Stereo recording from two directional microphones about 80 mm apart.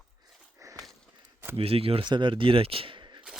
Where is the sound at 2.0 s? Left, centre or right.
Right.